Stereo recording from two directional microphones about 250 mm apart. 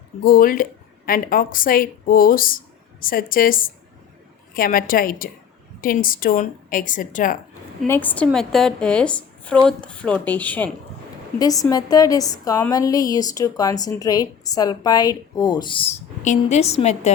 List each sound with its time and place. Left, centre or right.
0.3 s a woman's voice: left
7.8 s a woman's voice: centre; by 17.1 s left